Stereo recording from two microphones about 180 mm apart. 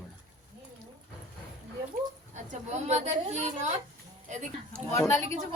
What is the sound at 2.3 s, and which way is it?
A woman's voice, 40° right (ahead or behind).